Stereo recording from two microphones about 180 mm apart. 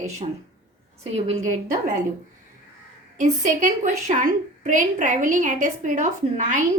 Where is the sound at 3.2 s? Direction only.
45° right (ahead or behind).